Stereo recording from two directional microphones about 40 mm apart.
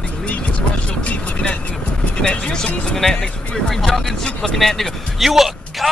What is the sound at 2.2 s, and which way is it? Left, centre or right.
Speech, left.